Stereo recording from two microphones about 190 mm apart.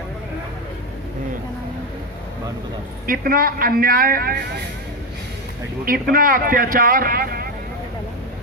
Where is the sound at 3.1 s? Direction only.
50° right (ahead or behind).